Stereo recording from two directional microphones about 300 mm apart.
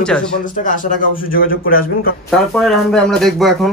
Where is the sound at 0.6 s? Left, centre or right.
Left.